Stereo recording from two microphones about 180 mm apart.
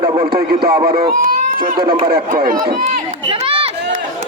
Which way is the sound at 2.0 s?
55° right (ahead or behind).